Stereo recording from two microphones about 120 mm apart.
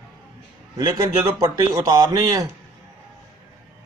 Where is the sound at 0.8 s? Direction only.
35° right (ahead or behind).